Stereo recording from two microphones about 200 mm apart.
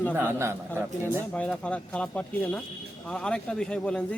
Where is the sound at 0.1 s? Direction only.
10° right (ahead or behind).